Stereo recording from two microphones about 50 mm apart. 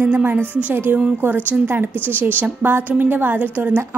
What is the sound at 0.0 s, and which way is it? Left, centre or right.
A woman's voice, right.